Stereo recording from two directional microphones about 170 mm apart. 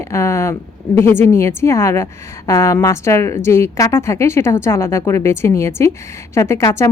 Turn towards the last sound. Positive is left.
turn(degrees=15)  # may be behind; listen again after turning